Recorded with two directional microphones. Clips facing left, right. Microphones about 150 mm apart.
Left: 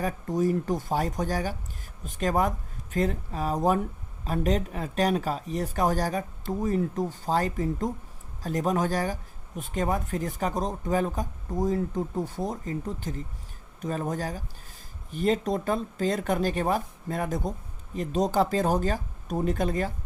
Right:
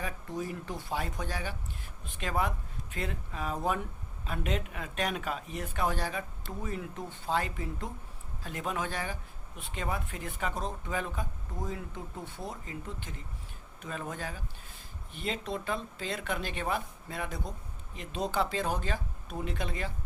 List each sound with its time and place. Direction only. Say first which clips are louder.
0.0 s speech: left 10 dB; 40° left (ahead or behind)